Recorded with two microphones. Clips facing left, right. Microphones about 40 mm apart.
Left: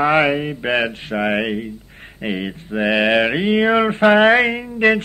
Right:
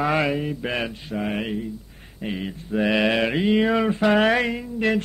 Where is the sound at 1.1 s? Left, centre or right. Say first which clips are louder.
Left 7 dB; left.